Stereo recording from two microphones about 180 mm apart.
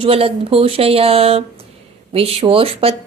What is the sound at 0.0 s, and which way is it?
Speech, 30° right (ahead or behind).